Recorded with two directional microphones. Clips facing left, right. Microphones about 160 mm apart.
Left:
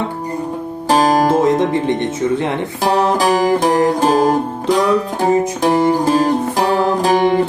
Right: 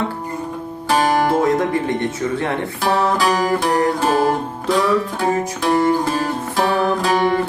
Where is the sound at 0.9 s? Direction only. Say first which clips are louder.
Left 4 dB; 40° left (ahead or behind).